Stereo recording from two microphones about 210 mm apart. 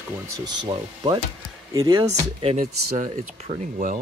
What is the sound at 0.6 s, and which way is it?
Ratchet, 20° right (ahead or behind).